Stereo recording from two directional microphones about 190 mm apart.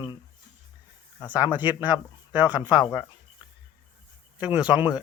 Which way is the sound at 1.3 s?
10° right (ahead or behind).